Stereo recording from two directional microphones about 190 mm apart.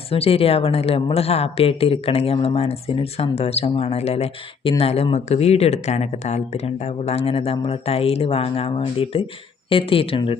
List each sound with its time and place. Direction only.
0.1 s a woman's voice: 30° left (ahead or behind)